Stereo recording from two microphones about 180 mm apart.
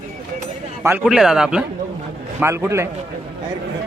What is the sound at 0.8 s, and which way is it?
A man's voice, 10° right (ahead or behind).